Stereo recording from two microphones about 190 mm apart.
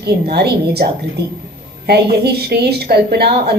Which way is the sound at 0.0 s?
60° right (ahead or behind).